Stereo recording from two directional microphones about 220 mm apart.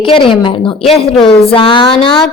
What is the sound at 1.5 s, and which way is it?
Speech, 25° left (ahead or behind).